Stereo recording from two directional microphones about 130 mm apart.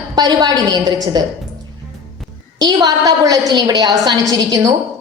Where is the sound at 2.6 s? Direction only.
30° right (ahead or behind).